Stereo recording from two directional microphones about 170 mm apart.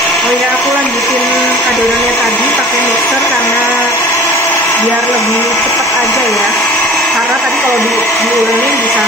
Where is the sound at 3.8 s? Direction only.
15° left (ahead or behind).